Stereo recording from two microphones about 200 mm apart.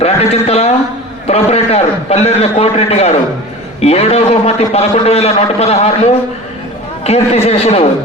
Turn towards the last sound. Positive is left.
turn(degrees=30)  # may be behind; listen again after turning